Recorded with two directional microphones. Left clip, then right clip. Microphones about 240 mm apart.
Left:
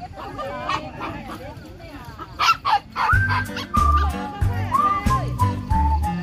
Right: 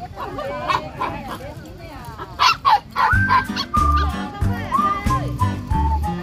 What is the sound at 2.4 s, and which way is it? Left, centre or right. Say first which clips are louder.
Music: right 3 dB; right.